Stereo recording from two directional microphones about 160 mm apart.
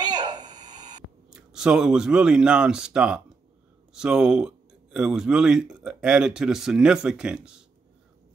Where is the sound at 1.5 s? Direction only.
5° right (ahead or behind).